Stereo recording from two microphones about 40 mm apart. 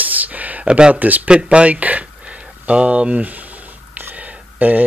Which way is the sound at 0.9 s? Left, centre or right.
Right.